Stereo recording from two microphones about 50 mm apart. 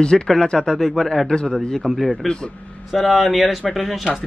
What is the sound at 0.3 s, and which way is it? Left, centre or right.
Speech, centre.